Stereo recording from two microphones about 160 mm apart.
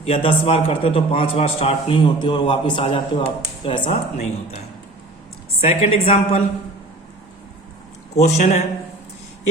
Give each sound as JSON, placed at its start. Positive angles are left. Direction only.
{"t": 0.0, "sound": "a man's voice", "side_deg": 35}
{"t": 8.1, "sound": "a man's voice", "side_deg": 45}